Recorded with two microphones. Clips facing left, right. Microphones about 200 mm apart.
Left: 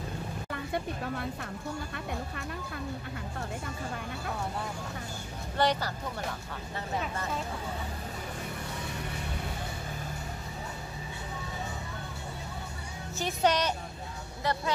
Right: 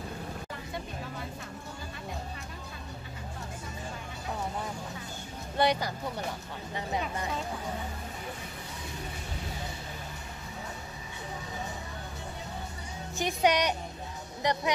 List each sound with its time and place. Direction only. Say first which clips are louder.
0.5 s vehicle: left 5 dB; 60° left (ahead or behind)
5.6 s speech: right 1 dB; 15° right (ahead or behind)
13.2 s speech: right 1 dB; 15° right (ahead or behind)